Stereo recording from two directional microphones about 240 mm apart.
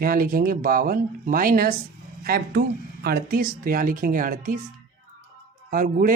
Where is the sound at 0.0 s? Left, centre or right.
Right.